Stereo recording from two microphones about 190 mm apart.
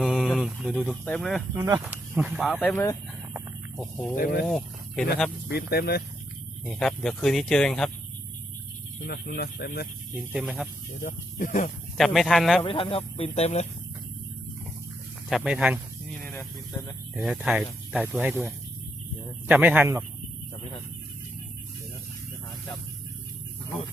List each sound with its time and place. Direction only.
0.0 s speech: centre (ahead or behind)
1.5 s speech: 15° right (ahead or behind)
2.5 s speech: 5° left (ahead or behind)
4.1 s speech: 50° left (ahead or behind)
4.4 s speech: 5° left (ahead or behind)
5.5 s speech: 55° left (ahead or behind)
6.7 s speech: 5° left (ahead or behind)
9.0 s speech: 55° left (ahead or behind)
10.3 s speech: 5° right (ahead or behind)
11.0 s speech: 45° left (ahead or behind)
11.9 s speech: centre (ahead or behind)
12.6 s speech: 30° left (ahead or behind)
15.3 s a sound: centre (ahead or behind)
17.2 s speech: centre (ahead or behind)